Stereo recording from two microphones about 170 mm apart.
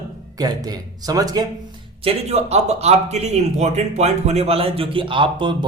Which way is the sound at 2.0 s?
40° right (ahead or behind).